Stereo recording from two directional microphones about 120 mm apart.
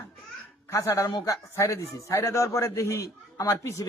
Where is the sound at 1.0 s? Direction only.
30° left (ahead or behind).